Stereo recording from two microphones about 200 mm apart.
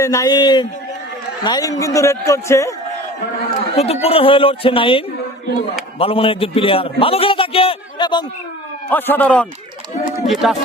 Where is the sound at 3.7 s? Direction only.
30° left (ahead or behind).